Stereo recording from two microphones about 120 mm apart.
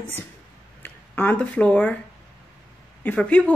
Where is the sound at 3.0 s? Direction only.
15° left (ahead or behind).